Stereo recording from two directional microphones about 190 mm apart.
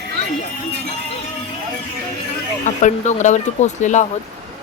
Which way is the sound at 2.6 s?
40° left (ahead or behind).